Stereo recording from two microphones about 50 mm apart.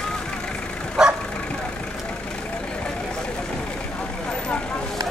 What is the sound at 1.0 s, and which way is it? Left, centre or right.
Bow-wow, centre.